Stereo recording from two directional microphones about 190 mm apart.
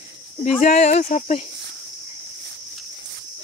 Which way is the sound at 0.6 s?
40° left (ahead or behind).